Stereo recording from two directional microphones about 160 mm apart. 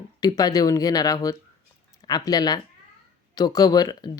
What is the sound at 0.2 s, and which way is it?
Speech, 25° left (ahead or behind).